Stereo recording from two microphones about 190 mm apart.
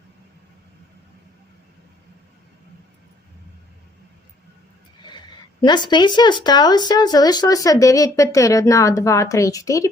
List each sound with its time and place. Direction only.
5.0 s speech: 25° left (ahead or behind)